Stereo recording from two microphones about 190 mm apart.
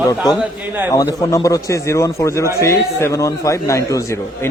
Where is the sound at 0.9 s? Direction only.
20° left (ahead or behind).